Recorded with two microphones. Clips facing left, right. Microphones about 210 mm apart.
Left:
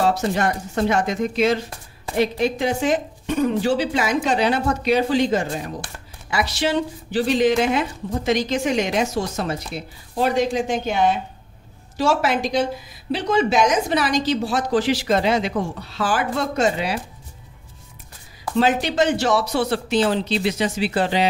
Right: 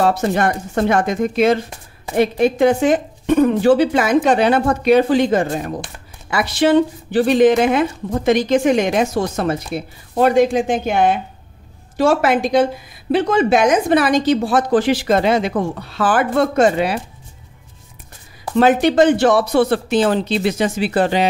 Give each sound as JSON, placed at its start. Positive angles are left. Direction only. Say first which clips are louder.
{"t": 0.0, "sound": "speech", "louder": "right 4 dB", "side_deg": -55}
{"t": 18.6, "sound": "speech", "louder": "right 6 dB", "side_deg": -55}